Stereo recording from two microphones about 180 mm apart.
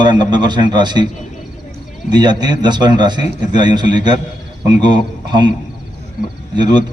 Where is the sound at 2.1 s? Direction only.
25° right (ahead or behind).